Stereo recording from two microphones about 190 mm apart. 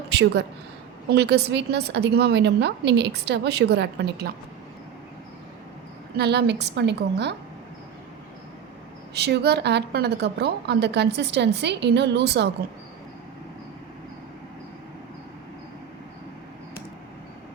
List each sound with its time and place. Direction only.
0.1 s a woman's voice: 65° right (ahead or behind)
6.1 s a woman's voice: 60° right (ahead or behind)
9.1 s a woman's voice: 60° right (ahead or behind)